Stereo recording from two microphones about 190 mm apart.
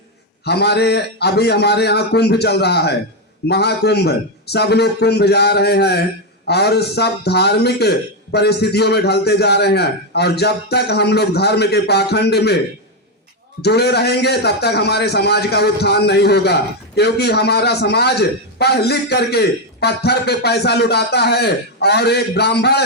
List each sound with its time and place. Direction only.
0.4 s a man's voice: 60° left (ahead or behind)
13.6 s a man's voice: 60° left (ahead or behind)